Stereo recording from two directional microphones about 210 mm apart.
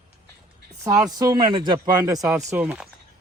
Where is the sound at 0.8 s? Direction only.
15° right (ahead or behind).